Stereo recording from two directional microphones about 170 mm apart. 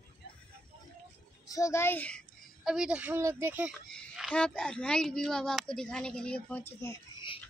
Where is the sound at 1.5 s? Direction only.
20° left (ahead or behind).